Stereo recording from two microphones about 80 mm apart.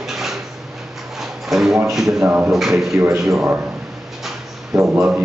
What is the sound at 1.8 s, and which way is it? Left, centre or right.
Speech, centre.